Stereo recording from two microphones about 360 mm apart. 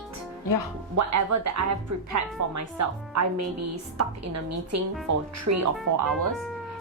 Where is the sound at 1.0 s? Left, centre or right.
Right.